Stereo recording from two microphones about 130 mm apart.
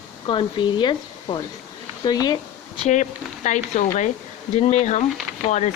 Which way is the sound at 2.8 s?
70° left (ahead or behind).